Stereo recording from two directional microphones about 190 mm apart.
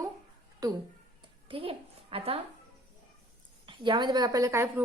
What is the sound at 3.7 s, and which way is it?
A woman's voice, 25° right (ahead or behind).